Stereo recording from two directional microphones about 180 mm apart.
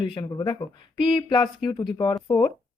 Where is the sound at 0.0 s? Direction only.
25° left (ahead or behind).